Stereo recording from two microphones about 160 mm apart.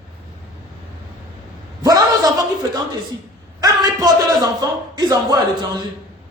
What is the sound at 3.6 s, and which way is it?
A man's voice, 25° right (ahead or behind).